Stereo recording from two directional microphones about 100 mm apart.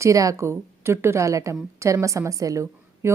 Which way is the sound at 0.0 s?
35° right (ahead or behind).